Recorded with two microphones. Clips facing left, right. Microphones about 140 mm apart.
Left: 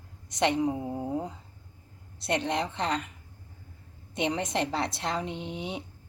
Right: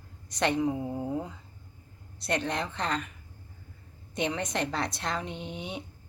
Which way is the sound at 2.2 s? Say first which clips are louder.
Left 2 dB; 25° left (ahead or behind).